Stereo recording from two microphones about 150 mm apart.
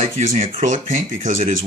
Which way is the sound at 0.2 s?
55° right (ahead or behind).